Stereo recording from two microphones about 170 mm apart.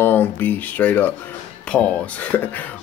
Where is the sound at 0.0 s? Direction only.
10° left (ahead or behind).